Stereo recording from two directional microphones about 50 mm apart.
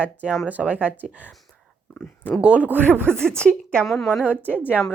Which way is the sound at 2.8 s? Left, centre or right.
Right.